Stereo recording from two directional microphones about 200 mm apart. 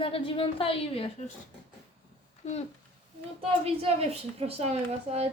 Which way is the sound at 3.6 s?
30° right (ahead or behind).